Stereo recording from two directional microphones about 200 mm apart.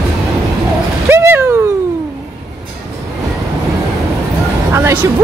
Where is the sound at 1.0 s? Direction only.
15° right (ahead or behind).